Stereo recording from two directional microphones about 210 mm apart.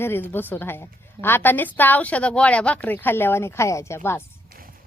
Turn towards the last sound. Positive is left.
turn(degrees=10)  # may be behind; listen again after turning